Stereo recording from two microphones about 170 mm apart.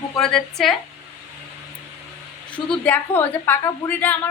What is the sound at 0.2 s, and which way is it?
Speech, 5° left (ahead or behind).